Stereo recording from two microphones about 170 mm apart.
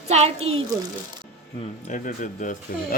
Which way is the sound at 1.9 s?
50° left (ahead or behind).